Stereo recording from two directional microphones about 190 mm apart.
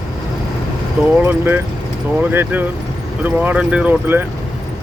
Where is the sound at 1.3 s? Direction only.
10° right (ahead or behind).